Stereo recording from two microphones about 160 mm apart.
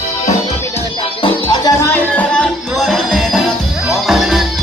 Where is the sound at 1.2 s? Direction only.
30° left (ahead or behind).